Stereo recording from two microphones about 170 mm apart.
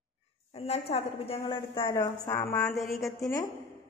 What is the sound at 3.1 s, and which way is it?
Speech, 20° left (ahead or behind).